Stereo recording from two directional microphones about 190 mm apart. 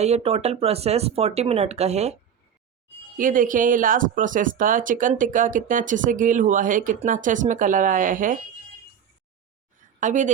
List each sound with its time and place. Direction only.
0.0 s speech: 35° right (ahead or behind)
3.2 s speech: 45° right (ahead or behind)
10.0 s speech: 40° right (ahead or behind)